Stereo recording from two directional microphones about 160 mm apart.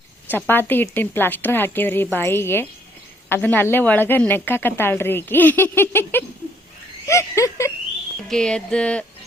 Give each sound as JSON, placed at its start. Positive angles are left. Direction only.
{"t": 0.3, "sound": "a woman's voice", "side_deg": 15}
{"t": 8.3, "sound": "a woman's voice", "side_deg": 5}